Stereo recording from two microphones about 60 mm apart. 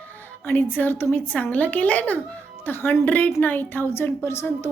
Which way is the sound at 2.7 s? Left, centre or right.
Left.